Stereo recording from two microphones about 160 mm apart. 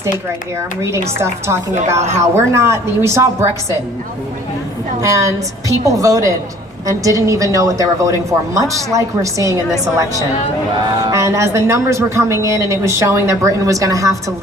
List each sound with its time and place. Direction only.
1.2 s a woman's voice: 15° right (ahead or behind)
4.9 s a woman's voice: 20° right (ahead or behind)